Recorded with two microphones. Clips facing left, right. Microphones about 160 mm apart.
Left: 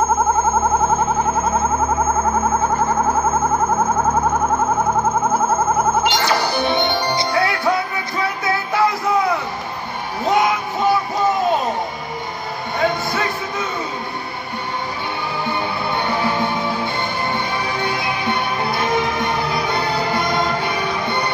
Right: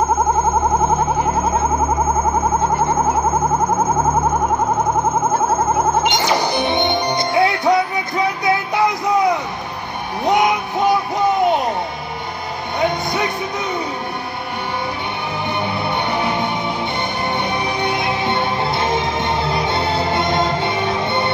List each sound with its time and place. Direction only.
6.0 s music: 20° right (ahead or behind)
10.2 s a sound: 20° right (ahead or behind)
12.8 s music: 20° right (ahead or behind)
16.1 s music: 20° right (ahead or behind)
17.7 s music: 20° right (ahead or behind)